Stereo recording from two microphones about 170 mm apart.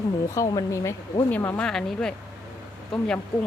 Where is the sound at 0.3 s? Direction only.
20° left (ahead or behind).